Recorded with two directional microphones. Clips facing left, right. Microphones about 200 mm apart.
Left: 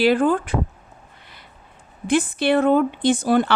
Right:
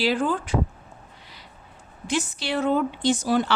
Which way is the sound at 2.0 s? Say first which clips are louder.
Left 8 dB; 55° left (ahead or behind).